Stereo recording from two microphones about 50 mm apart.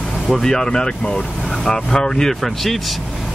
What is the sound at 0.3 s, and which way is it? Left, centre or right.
Speech, centre.